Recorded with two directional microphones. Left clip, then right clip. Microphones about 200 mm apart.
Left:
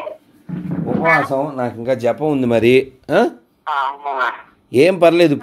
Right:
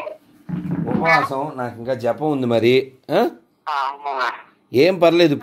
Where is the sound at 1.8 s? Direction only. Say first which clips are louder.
Left 3 dB; 25° left (ahead or behind).